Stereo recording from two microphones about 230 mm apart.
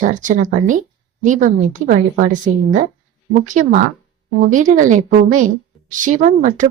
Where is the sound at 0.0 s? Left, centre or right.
Right.